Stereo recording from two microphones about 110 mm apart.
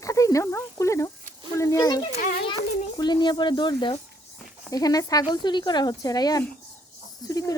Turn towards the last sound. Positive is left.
turn(degrees=35)  # may be behind; listen again after turning